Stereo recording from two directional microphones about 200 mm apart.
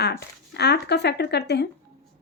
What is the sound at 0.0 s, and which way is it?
Speech, 55° left (ahead or behind).